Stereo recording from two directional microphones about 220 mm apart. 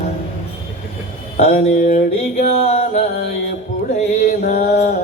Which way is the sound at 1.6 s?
30° left (ahead or behind).